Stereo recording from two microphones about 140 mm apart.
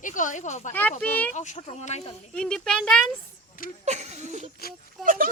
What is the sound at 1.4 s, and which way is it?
Speech, 55° left (ahead or behind).